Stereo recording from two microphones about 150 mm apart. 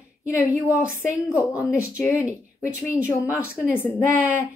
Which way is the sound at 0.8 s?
15° left (ahead or behind).